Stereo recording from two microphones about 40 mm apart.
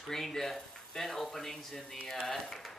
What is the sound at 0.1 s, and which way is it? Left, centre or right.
A man's voice, centre.